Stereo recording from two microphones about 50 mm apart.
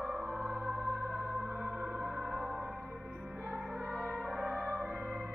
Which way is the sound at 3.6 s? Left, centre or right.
Centre.